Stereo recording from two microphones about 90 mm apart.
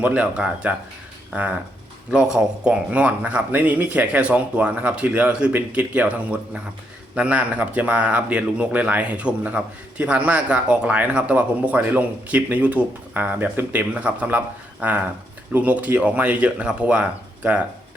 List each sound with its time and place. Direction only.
0.0 s a man's voice: 15° right (ahead or behind)
2.0 s a man's voice: 10° right (ahead or behind)